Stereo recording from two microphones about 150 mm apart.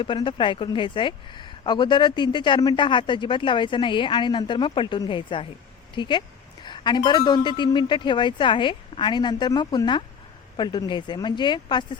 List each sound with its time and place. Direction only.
0.0 s speech: 30° left (ahead or behind)